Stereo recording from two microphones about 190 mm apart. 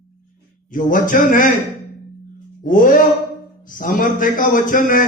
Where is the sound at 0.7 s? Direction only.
45° left (ahead or behind).